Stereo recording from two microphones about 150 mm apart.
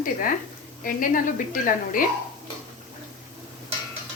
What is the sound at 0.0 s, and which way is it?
A woman's voice, 65° left (ahead or behind).